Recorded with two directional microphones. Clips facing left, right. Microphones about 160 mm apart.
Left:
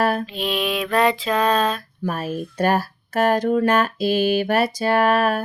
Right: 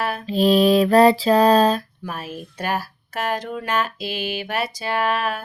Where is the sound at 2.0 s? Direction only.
45° left (ahead or behind).